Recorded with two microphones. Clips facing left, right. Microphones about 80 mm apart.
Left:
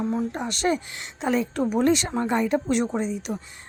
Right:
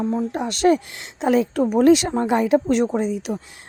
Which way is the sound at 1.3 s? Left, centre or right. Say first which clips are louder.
Right 5 dB; right.